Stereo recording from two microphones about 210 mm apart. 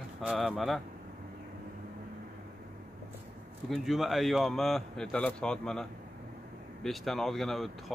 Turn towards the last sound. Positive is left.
turn(degrees=0)  # may be behind; listen again after turning